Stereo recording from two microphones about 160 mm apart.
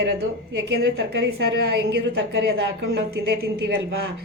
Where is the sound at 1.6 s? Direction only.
90° right.